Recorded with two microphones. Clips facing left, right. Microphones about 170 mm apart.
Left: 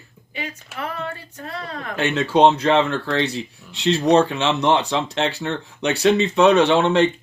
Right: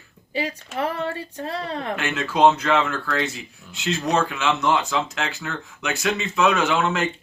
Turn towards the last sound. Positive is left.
turn(degrees=30)  # may be behind; listen again after turning